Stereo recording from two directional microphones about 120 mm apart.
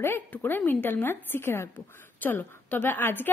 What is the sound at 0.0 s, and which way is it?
A woman's voice, 20° left (ahead or behind).